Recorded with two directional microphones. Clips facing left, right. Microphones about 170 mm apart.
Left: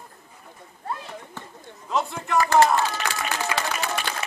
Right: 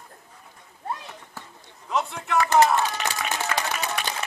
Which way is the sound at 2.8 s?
20° right (ahead or behind).